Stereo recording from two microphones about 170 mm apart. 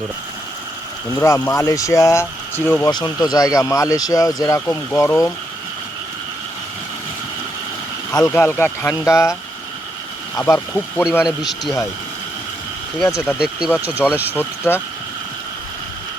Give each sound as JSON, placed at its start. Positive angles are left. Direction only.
{"t": 1.1, "sound": "speech", "side_deg": 15}
{"t": 2.9, "sound": "speech", "side_deg": 25}
{"t": 8.1, "sound": "speech", "side_deg": 15}
{"t": 10.3, "sound": "speech", "side_deg": 15}
{"t": 11.2, "sound": "speech", "side_deg": 0}
{"t": 13.1, "sound": "speech", "side_deg": 15}
{"t": 13.8, "sound": "speech", "side_deg": -10}
{"t": 14.3, "sound": "speech", "side_deg": 15}